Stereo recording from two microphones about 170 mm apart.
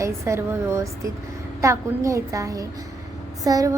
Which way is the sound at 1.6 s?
15° right (ahead or behind).